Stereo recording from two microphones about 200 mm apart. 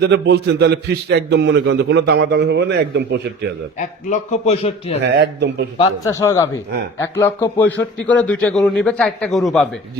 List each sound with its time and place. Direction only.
0.0 s a man's voice: 55° right (ahead or behind)
3.8 s a man's voice: 35° left (ahead or behind)
5.0 s a man's voice: 55° right (ahead or behind)
6.1 s a man's voice: 15° left (ahead or behind)